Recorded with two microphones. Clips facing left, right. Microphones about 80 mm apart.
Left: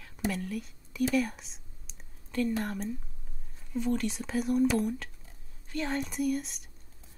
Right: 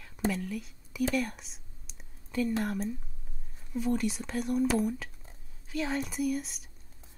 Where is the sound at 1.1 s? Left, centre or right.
Centre.